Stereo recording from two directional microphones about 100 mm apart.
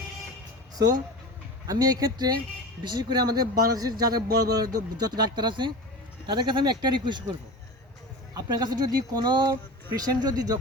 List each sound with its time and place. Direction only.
1.6 s speech: 40° right (ahead or behind)
8.3 s speech: 40° right (ahead or behind)